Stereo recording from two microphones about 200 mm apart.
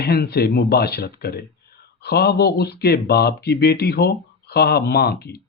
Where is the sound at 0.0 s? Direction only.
50° left (ahead or behind).